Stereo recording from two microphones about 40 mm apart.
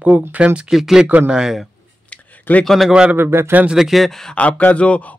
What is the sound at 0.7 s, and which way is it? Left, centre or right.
Speech, centre.